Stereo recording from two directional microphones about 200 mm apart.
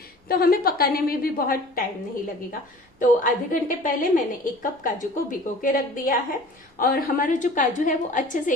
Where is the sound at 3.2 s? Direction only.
40° left (ahead or behind).